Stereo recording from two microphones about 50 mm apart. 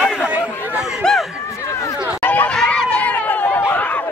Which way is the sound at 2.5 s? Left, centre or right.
Centre.